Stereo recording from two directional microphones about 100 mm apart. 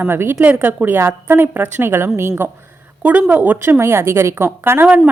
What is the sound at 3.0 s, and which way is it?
Speech, 15° right (ahead or behind).